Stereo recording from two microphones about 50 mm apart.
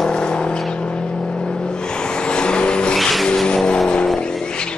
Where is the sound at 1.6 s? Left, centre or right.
Centre.